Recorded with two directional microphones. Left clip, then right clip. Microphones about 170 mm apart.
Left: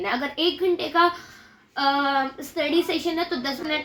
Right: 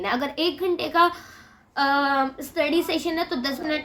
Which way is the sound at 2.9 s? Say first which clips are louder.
Even; 20° right (ahead or behind).